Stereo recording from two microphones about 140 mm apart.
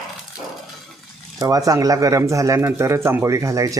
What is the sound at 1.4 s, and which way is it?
Speech, 25° right (ahead or behind).